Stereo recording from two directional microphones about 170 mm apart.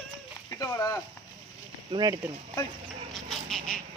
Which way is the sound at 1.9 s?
25° right (ahead or behind).